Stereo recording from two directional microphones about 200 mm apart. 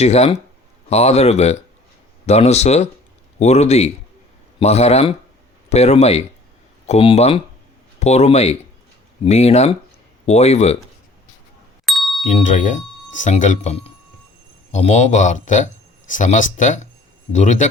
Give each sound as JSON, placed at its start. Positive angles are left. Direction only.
{"t": 0.0, "sound": "speech", "side_deg": 30}
{"t": 11.9, "sound": "ding", "side_deg": 0}
{"t": 12.2, "sound": "speech", "side_deg": 40}